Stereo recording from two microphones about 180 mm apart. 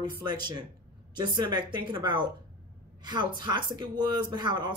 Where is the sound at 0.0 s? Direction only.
25° right (ahead or behind).